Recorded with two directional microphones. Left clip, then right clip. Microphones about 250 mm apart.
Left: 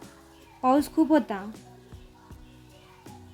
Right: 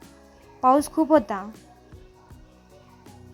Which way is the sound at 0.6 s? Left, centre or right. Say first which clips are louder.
Right 4 dB; centre.